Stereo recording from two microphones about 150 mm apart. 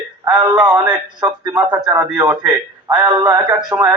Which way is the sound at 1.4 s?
25° right (ahead or behind).